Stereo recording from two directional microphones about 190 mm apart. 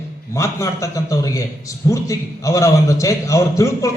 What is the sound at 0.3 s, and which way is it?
A man's voice, 15° left (ahead or behind).